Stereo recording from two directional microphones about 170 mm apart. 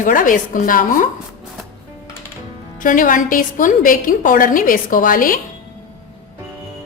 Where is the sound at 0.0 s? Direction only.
50° left (ahead or behind).